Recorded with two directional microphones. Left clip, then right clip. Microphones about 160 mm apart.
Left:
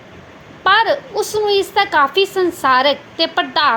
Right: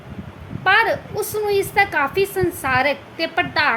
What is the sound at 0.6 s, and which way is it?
A woman's voice, 20° left (ahead or behind).